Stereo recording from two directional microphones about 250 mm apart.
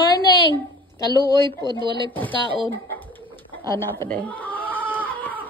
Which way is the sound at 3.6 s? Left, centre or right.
Centre.